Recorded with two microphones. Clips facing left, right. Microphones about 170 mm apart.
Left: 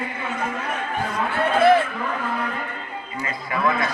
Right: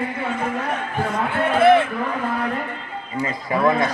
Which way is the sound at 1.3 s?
25° right (ahead or behind).